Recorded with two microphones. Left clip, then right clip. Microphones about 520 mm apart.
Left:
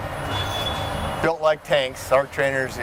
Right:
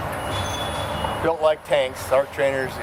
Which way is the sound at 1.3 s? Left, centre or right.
Left.